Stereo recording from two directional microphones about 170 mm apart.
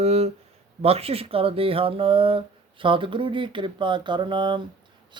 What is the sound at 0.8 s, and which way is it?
Speech, 35° right (ahead or behind).